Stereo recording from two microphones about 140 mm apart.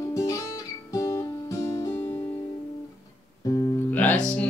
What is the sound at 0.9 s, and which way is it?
Music, 20° left (ahead or behind).